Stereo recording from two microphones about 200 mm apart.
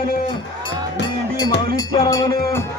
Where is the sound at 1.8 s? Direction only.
20° left (ahead or behind).